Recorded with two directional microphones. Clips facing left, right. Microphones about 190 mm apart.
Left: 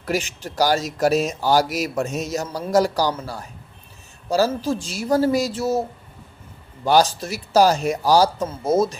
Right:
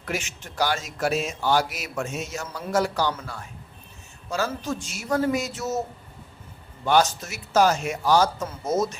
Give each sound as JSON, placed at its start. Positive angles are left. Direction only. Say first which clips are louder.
{"t": 0.0, "sound": "speech", "louder": "left 7 dB", "side_deg": 35}
{"t": 6.8, "sound": "speech", "louder": "left 4 dB", "side_deg": 35}